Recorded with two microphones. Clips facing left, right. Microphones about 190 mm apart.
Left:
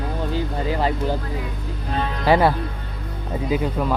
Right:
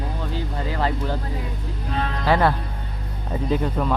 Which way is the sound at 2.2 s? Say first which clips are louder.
Left 3 dB; 15° left (ahead or behind).